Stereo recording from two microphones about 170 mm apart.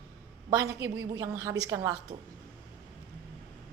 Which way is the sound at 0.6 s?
15° right (ahead or behind).